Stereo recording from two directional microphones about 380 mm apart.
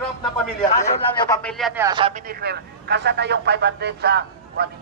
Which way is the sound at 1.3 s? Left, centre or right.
Centre.